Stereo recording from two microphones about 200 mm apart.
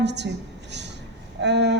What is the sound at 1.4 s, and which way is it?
Speech, 60° right (ahead or behind).